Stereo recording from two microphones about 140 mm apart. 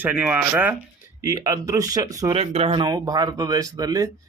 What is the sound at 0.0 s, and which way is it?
Speech, 10° right (ahead or behind).